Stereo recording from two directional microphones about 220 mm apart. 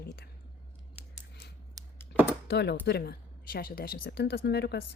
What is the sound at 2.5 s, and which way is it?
Speech, 50° left (ahead or behind).